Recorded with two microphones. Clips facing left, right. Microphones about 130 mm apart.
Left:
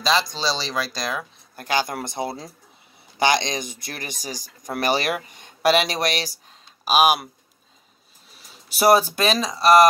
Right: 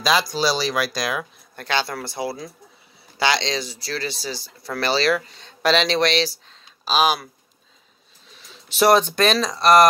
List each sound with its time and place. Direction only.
0.0 s speech: 5° right (ahead or behind)
1.6 s speech: 10° left (ahead or behind)
8.5 s speech: 10° left (ahead or behind)